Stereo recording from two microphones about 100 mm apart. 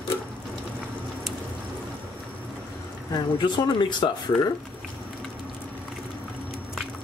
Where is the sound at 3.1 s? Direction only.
50° left (ahead or behind).